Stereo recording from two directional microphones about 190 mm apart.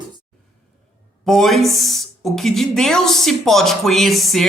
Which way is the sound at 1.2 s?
Centre (ahead or behind).